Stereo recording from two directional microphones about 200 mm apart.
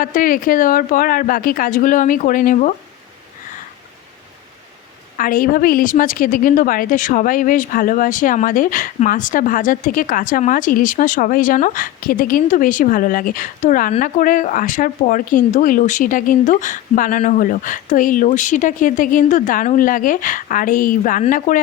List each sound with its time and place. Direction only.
0.0 s a woman's voice: 45° left (ahead or behind)
5.1 s a woman's voice: 45° left (ahead or behind)